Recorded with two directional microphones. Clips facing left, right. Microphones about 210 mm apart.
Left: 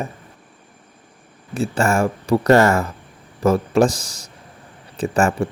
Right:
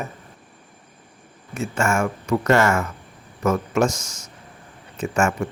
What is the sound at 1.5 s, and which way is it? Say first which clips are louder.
Speech: left 4 dB; 35° left (ahead or behind).